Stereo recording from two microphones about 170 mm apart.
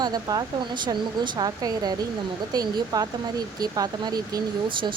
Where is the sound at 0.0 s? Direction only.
25° right (ahead or behind).